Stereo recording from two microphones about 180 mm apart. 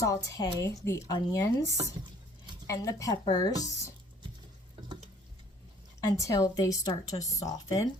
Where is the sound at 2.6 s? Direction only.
20° left (ahead or behind).